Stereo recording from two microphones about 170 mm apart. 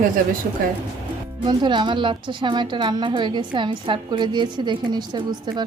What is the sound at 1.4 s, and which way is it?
A woman's voice, 25° right (ahead or behind).